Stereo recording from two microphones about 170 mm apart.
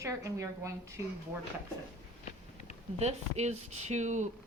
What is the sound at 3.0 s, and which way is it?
Speech, 40° right (ahead or behind).